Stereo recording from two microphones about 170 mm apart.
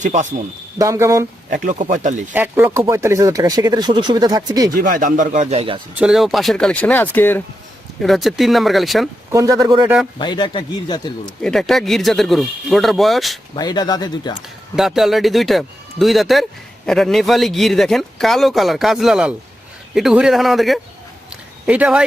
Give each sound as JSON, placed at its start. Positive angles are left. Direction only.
{"t": 0.0, "sound": "speech", "side_deg": -45}
{"t": 0.8, "sound": "speech", "side_deg": -15}
{"t": 1.5, "sound": "speech", "side_deg": -50}
{"t": 2.3, "sound": "speech", "side_deg": -10}
{"t": 4.8, "sound": "speech", "side_deg": -55}
{"t": 5.9, "sound": "a man's voice", "side_deg": -5}
{"t": 8.0, "sound": "a man's voice", "side_deg": 0}
{"t": 9.3, "sound": "speech", "side_deg": -20}
{"t": 10.2, "sound": "speech", "side_deg": 25}
{"t": 11.4, "sound": "a man's voice", "side_deg": 0}
{"t": 13.6, "sound": "speech", "side_deg": 25}
{"t": 14.8, "sound": "a man's voice", "side_deg": 0}
{"t": 21.2, "sound": "a sound", "side_deg": -5}